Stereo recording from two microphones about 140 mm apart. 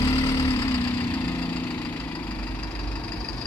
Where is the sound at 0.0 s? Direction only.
25° left (ahead or behind).